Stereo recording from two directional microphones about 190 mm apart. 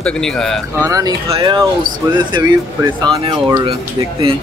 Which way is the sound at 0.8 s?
20° right (ahead or behind).